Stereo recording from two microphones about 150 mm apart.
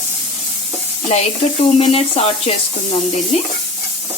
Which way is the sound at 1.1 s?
45° left (ahead or behind).